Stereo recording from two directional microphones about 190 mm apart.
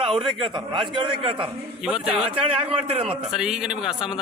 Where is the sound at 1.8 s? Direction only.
5° right (ahead or behind).